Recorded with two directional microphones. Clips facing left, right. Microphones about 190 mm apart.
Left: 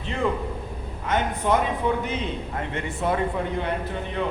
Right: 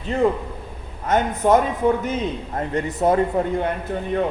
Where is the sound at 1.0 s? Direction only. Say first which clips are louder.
Right 5 dB; 45° right (ahead or behind).